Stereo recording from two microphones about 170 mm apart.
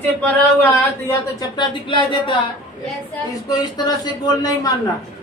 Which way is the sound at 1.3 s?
25° left (ahead or behind).